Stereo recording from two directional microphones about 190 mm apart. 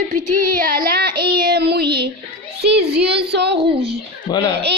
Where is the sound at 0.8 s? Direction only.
55° right (ahead or behind).